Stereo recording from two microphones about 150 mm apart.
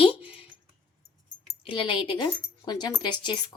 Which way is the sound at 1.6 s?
35° left (ahead or behind).